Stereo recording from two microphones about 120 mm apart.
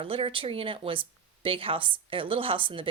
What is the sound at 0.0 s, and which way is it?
Speech, 50° right (ahead or behind).